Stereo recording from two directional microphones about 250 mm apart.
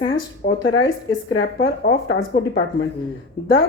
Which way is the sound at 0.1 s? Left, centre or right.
Left.